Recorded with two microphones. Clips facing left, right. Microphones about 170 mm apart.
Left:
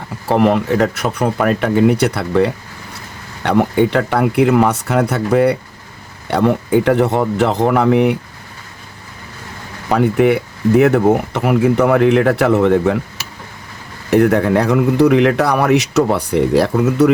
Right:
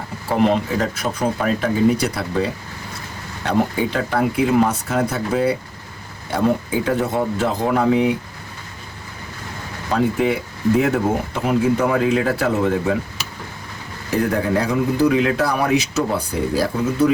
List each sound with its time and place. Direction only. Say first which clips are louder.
0.3 s a man's voice: left 4 dB; 65° left (ahead or behind)
9.9 s a man's voice: left 6 dB; 70° left (ahead or behind)
14.1 s a man's voice: left 7 dB; 70° left (ahead or behind)